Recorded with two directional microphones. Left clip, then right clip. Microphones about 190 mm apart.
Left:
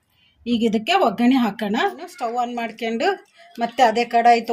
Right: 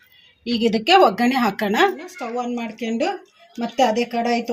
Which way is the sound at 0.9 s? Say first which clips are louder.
Right 4 dB; 25° right (ahead or behind).